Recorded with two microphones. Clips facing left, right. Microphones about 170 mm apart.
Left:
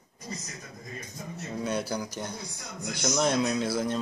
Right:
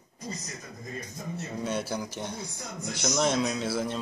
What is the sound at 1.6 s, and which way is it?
A man's voice, 5° right (ahead or behind).